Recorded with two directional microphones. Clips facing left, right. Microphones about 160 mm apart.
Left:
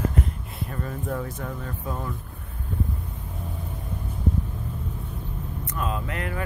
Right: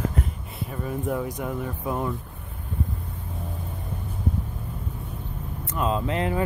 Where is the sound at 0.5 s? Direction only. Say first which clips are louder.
Right 3 dB; 10° right (ahead or behind).